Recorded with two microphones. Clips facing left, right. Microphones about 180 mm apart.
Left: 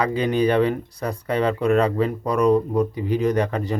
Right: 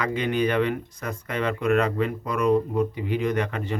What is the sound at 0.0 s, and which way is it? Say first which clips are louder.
Speech: left 4 dB; 35° left (ahead or behind).